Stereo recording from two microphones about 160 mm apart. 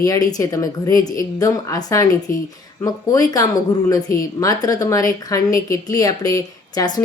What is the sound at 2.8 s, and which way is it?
Speech, 25° left (ahead or behind).